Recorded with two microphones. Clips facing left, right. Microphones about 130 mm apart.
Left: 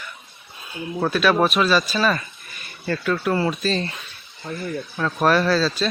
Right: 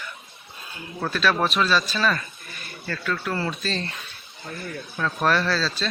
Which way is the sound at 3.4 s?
5° left (ahead or behind).